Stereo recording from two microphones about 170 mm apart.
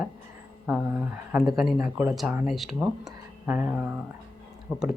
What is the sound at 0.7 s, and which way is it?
Speech, 5° right (ahead or behind).